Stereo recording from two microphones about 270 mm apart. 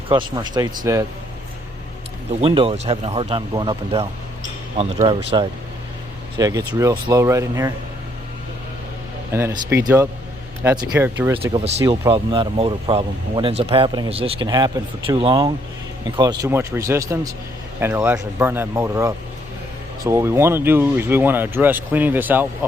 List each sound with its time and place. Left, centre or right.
0.1 s speech: centre
2.4 s speech: right
9.3 s speech: centre
11.5 s speech: right